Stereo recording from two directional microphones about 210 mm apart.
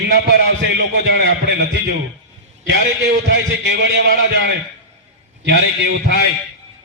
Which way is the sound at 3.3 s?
55° right (ahead or behind).